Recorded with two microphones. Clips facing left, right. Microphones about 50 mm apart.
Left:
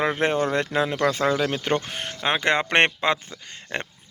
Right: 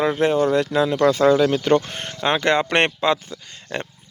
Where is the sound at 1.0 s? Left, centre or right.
Centre.